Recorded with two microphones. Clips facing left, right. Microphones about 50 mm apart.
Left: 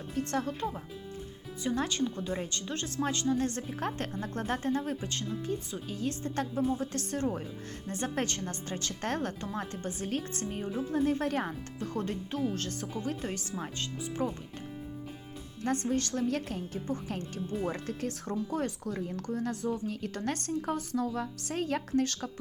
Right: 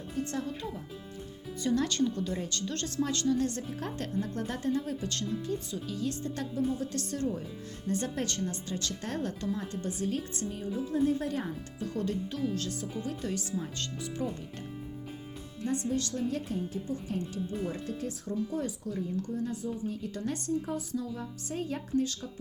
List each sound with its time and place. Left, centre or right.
0.2 s speech: left
1.6 s a woman's voice: centre; by 5.0 s left
5.0 s a woman's voice: left
9.0 s speech: left
9.6 s speech: left
11.9 s a woman's voice: left
14.2 s speech: centre
15.6 s speech: left
16.3 s speech: left
19.0 s a woman's voice: left